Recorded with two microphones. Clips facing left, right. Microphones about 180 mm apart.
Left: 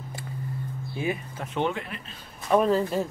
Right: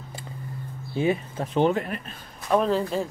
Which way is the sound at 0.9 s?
30° right (ahead or behind).